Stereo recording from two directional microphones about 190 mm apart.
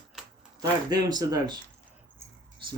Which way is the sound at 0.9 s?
20° right (ahead or behind).